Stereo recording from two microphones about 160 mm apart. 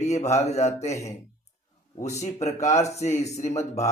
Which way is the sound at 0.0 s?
45° left (ahead or behind).